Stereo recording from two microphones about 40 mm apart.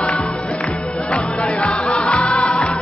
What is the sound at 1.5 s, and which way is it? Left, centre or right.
Music, centre.